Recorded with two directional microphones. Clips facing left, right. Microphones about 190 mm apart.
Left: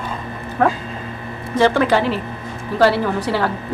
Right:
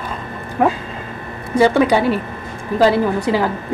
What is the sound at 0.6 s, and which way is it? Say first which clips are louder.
A woman's voice: right 1 dB; 15° right (ahead or behind).